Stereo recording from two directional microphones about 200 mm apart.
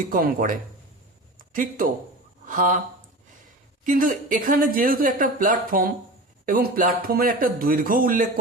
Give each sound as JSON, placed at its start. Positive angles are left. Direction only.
{"t": 0.0, "sound": "speech", "side_deg": -45}
{"t": 1.4, "sound": "a sound", "side_deg": -45}
{"t": 2.5, "sound": "speech", "side_deg": -40}
{"t": 3.8, "sound": "speech", "side_deg": -40}